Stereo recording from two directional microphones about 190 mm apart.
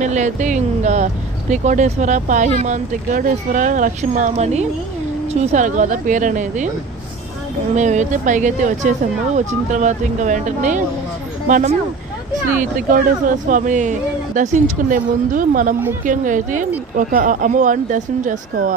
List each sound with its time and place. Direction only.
0.0 s speech: 40° right (ahead or behind)
7.7 s speech: 40° right (ahead or behind)